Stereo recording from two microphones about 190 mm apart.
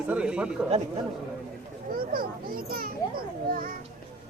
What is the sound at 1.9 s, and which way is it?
A child's voice, 50° right (ahead or behind).